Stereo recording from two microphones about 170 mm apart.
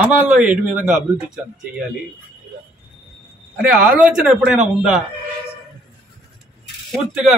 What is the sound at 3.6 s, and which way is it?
Speech, 5° right (ahead or behind).